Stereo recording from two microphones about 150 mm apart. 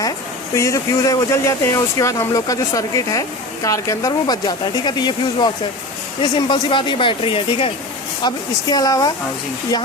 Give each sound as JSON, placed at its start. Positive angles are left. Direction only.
{"t": 0.5, "sound": "speech", "side_deg": 20}